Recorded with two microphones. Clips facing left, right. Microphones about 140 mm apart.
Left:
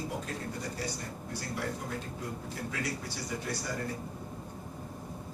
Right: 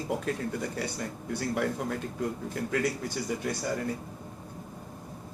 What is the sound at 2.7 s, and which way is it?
Speech, 50° right (ahead or behind).